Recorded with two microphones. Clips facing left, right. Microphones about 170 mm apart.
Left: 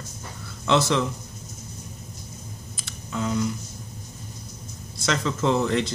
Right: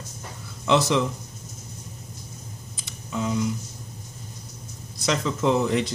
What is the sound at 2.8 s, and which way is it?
Computer keyboard, 15° right (ahead or behind).